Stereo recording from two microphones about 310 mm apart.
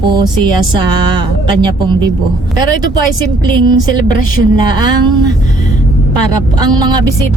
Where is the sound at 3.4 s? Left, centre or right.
Centre.